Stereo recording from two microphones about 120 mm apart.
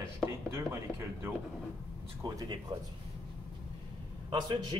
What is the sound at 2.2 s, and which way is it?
Speech, 35° right (ahead or behind).